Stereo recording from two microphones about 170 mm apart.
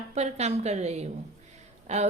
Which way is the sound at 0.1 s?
40° right (ahead or behind).